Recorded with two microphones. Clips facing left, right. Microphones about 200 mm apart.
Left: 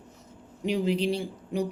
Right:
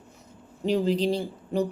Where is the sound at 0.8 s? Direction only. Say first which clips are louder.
Right 2 dB; 40° right (ahead or behind).